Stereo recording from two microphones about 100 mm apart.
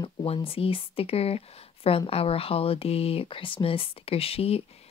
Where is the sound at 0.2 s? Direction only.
70° left (ahead or behind).